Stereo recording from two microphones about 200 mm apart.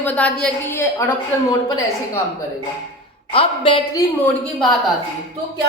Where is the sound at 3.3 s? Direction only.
25° left (ahead or behind).